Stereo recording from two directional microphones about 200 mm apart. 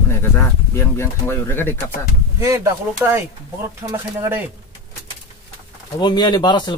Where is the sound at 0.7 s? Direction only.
15° left (ahead or behind).